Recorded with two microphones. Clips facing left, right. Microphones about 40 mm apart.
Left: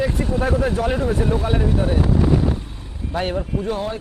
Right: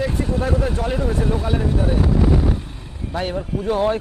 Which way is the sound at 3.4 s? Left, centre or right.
Centre.